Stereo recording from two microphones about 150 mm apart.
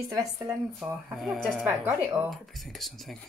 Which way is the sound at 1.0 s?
Centre (ahead or behind).